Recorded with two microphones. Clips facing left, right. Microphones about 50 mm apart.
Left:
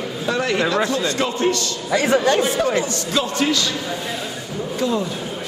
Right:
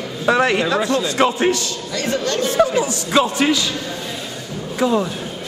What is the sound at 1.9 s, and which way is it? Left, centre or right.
Speech, centre.